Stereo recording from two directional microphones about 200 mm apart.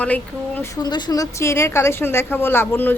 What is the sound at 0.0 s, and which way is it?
Speech, 10° left (ahead or behind).